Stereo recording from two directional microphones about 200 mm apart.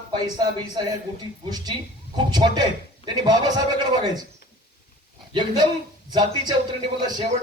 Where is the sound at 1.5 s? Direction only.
20° right (ahead or behind).